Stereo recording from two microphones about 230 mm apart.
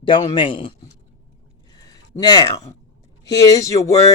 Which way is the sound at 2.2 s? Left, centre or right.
Centre.